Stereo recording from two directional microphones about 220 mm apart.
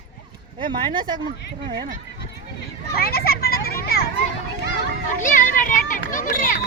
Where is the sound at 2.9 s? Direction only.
45° left (ahead or behind).